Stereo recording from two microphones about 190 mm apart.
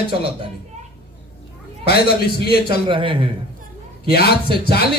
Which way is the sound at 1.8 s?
55° left (ahead or behind).